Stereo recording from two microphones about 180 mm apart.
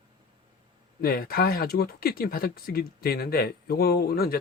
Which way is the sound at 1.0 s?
55° left (ahead or behind).